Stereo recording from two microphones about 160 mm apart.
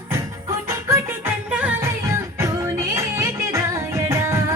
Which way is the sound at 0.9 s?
10° right (ahead or behind).